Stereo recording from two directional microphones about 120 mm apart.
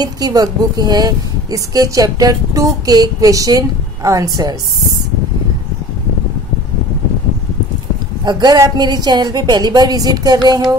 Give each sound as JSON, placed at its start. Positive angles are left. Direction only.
{"t": 0.0, "sound": "a woman's voice", "side_deg": -30}
{"t": 8.3, "sound": "a woman's voice", "side_deg": -35}